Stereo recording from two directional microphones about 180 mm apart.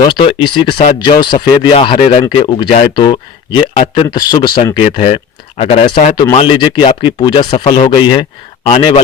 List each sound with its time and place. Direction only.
0.0 s speech: 25° left (ahead or behind)